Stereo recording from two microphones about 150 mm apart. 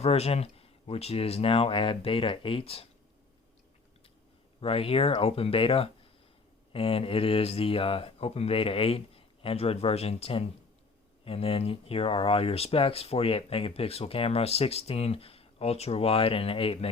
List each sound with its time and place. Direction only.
0.0 s speech: 40° left (ahead or behind)
4.6 s speech: 40° left (ahead or behind)